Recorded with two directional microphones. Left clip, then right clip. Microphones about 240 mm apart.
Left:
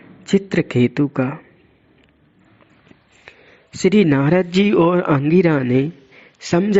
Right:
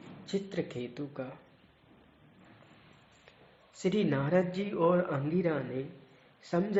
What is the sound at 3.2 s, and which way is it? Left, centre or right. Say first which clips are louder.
Speech: left 18 dB; left.